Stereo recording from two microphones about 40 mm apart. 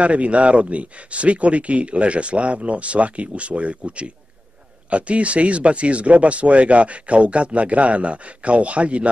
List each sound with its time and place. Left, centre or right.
0.0 s speech: right